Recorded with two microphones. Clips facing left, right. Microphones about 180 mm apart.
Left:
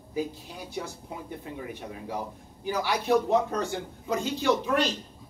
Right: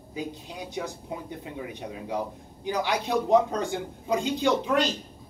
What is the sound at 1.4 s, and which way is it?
A man's voice, 20° right (ahead or behind).